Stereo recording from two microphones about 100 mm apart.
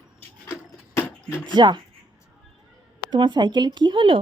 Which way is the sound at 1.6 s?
45° right (ahead or behind).